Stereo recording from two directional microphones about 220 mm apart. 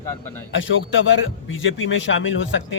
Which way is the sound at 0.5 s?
55° left (ahead or behind).